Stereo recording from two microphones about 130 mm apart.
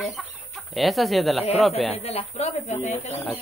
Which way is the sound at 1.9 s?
50° left (ahead or behind).